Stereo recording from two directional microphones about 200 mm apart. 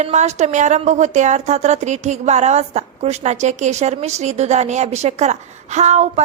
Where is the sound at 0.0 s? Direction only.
35° right (ahead or behind).